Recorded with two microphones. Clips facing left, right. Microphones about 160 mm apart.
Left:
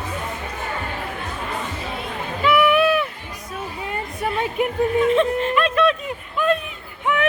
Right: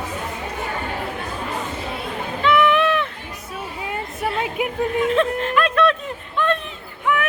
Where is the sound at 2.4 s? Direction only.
10° left (ahead or behind).